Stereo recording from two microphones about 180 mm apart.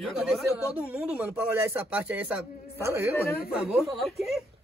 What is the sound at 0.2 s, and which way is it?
Speech, centre (ahead or behind).